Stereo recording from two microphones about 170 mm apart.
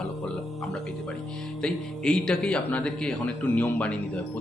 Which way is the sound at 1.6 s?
5° left (ahead or behind).